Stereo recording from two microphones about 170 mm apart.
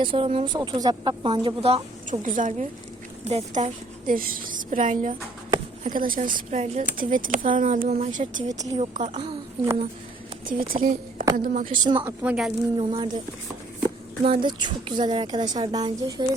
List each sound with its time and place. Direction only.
0.0 s speech: 30° right (ahead or behind)
2.0 s speech: 50° right (ahead or behind)
7.8 s speech: 40° right (ahead or behind)
10.4 s a woman's voice: 55° right (ahead or behind)
12.0 s a woman's voice: 5° right (ahead or behind)
12.7 s speech: 25° right (ahead or behind)